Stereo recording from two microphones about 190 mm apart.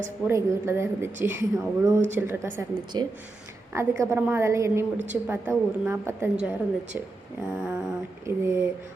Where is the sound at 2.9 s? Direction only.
20° right (ahead or behind).